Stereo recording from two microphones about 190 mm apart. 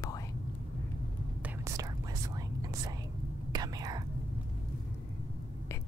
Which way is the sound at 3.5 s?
20° right (ahead or behind).